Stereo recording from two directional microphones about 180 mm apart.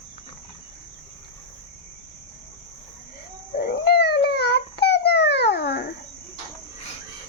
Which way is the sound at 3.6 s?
60° left (ahead or behind).